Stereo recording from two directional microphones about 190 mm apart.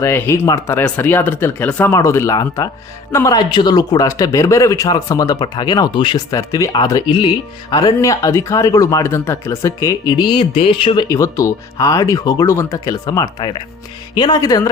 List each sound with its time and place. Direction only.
0.0 s a man's voice: 15° left (ahead or behind)
11.1 s a man's voice: 15° left (ahead or behind)